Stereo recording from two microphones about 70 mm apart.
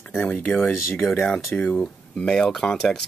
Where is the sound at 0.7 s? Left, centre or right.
Left.